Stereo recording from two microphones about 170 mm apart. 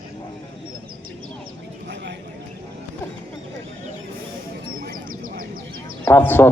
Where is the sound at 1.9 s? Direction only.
90° right.